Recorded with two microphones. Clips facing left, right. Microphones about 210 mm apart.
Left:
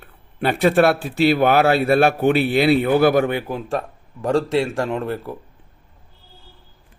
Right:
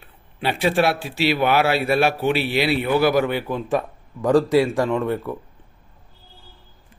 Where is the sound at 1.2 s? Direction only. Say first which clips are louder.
Left 4 dB; 50° left (ahead or behind).